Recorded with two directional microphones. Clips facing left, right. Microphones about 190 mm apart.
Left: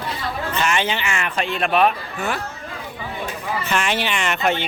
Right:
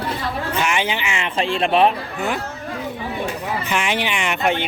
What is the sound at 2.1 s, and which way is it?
Speech, 15° right (ahead or behind).